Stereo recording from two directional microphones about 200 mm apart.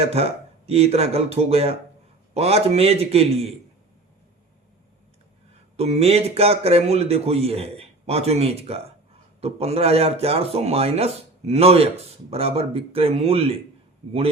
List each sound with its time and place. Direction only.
0.0 s a man's voice: 30° right (ahead or behind)
5.7 s a man's voice: 30° right (ahead or behind)